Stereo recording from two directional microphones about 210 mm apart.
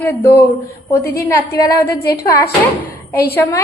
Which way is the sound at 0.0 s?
10° left (ahead or behind).